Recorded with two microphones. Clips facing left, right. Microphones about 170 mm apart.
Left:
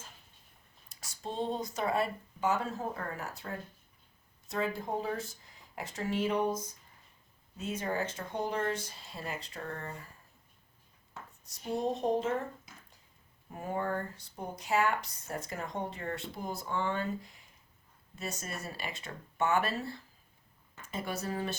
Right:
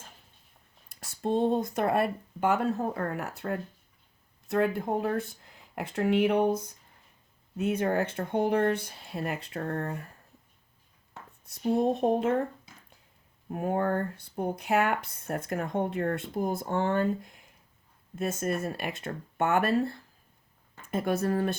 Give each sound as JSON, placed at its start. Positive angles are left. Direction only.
{"t": 0.9, "sound": "speech", "side_deg": -55}
{"t": 11.4, "sound": "speech", "side_deg": -55}
{"t": 13.5, "sound": "speech", "side_deg": -60}